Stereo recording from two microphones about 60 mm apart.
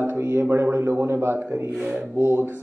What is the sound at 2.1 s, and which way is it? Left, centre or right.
Speech, right.